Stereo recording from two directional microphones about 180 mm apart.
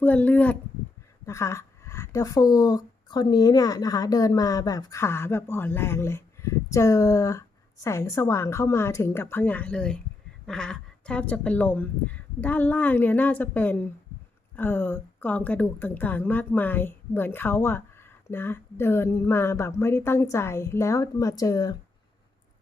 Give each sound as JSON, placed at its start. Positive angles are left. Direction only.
{"t": 0.0, "sound": "speech", "side_deg": 10}